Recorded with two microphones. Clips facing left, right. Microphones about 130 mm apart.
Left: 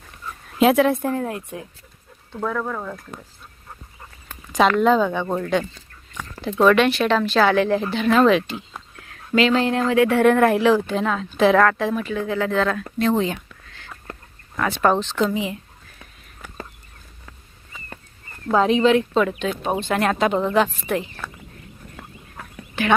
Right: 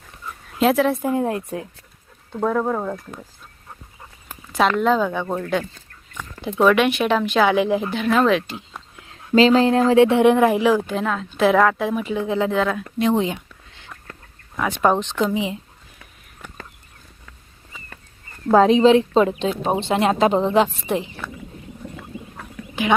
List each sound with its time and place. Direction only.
0.6 s speech: centre (ahead or behind)
1.3 s speech: 30° right (ahead or behind)
4.3 s a sound: 5° right (ahead or behind)
4.8 s speech: centre (ahead or behind)
6.4 s speech: 10° right (ahead or behind)
9.0 s a sound: 20° right (ahead or behind)
9.9 s speech: 25° right (ahead or behind)
14.5 s speech: 10° right (ahead or behind)
17.7 s a sound: centre (ahead or behind)
18.5 s speech: 35° right (ahead or behind)
22.1 s rowboat: 20° right (ahead or behind)